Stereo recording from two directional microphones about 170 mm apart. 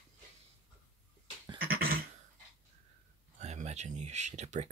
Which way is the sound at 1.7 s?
60° right (ahead or behind).